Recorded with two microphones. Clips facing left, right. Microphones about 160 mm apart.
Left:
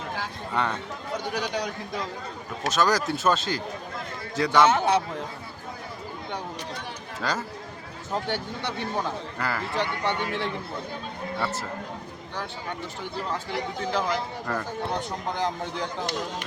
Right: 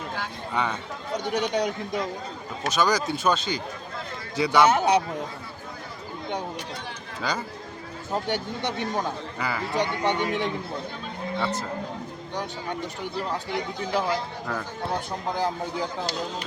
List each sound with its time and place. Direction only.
0.5 s speech: centre (ahead or behind)
1.1 s a man's voice: 20° right (ahead or behind)
2.6 s speech: centre (ahead or behind)
4.6 s speech: 15° right (ahead or behind)
7.2 s speech: centre (ahead or behind)
8.1 s speech: 20° right (ahead or behind)
9.4 s speech: centre (ahead or behind)
9.7 s speech: 15° right (ahead or behind)
11.3 s speech: 5° left (ahead or behind)
13.9 s speech: 10° right (ahead or behind)